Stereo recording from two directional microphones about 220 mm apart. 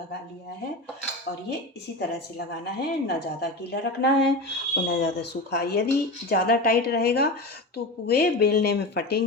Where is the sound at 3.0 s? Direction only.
50° left (ahead or behind).